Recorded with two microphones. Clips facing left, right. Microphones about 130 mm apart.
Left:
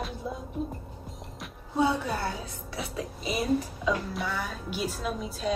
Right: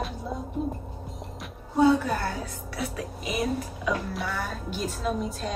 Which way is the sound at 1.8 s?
20° left (ahead or behind).